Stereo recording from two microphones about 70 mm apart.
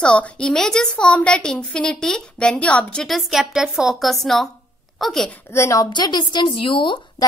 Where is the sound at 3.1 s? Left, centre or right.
Centre.